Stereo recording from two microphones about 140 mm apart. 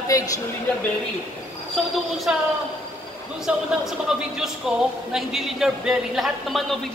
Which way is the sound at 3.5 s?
10° right (ahead or behind).